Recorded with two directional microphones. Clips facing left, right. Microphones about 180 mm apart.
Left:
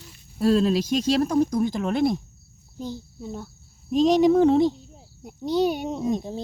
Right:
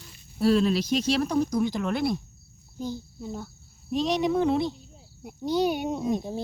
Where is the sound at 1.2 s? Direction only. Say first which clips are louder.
Left 3 dB; 45° left (ahead or behind).